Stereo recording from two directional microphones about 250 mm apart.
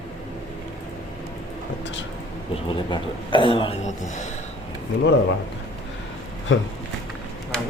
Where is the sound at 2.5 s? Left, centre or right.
Centre.